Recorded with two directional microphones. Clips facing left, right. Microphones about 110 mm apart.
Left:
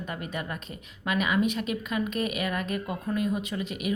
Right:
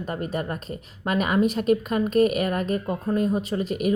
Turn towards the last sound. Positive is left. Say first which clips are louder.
# right 7 dB
turn(degrees=-40)  # may be behind; listen again after turning